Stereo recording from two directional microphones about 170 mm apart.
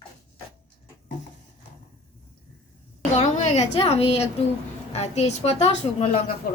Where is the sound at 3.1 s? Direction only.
45° left (ahead or behind).